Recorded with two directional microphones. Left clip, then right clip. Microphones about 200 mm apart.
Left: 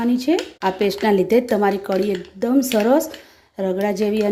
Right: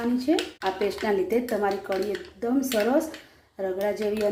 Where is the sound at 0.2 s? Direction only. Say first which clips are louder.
Left 5 dB; 60° left (ahead or behind).